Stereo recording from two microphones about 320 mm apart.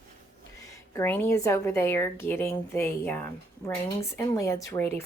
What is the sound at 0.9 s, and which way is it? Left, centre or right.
A woman's voice, centre.